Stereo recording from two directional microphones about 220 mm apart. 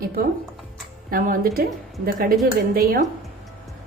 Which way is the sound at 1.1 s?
40° right (ahead or behind).